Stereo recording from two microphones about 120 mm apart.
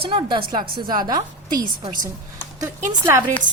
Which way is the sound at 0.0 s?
45° right (ahead or behind).